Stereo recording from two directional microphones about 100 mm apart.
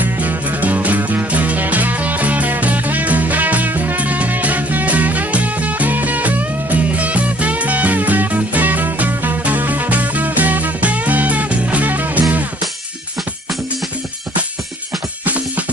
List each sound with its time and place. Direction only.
0.0 s music: 15° right (ahead or behind)
15.2 s music: 15° right (ahead or behind)